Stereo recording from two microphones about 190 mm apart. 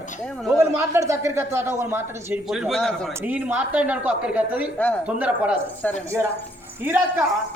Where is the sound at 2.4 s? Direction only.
Centre (ahead or behind).